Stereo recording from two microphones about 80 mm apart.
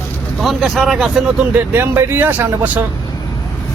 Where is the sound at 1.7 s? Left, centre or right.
Right.